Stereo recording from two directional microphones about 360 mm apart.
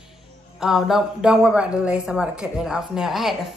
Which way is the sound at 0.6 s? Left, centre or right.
Centre.